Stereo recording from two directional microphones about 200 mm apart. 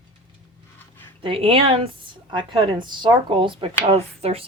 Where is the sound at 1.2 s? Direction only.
25° right (ahead or behind).